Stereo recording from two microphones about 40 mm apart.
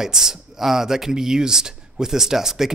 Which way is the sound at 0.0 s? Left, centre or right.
Centre.